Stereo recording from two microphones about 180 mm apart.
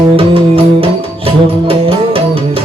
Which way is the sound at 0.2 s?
30° right (ahead or behind).